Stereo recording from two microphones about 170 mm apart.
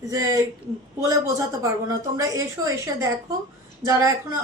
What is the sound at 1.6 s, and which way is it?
A woman's voice, 20° right (ahead or behind).